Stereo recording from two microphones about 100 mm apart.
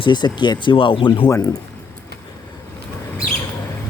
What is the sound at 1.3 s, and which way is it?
Speech, 35° left (ahead or behind).